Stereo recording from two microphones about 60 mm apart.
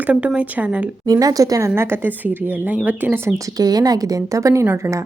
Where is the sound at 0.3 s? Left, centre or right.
Right.